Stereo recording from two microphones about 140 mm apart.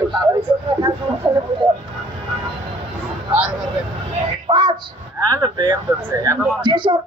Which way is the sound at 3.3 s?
10° right (ahead or behind).